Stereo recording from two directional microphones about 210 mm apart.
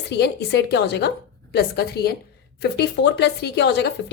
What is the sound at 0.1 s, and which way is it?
A woman's voice, 50° left (ahead or behind).